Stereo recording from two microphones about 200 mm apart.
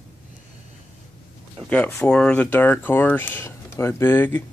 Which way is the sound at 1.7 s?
5° left (ahead or behind).